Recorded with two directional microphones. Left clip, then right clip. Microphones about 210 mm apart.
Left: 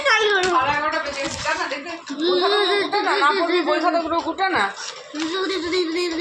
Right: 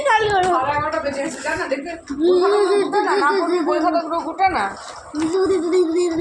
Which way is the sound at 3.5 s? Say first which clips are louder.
Right 1 dB; 40° left (ahead or behind).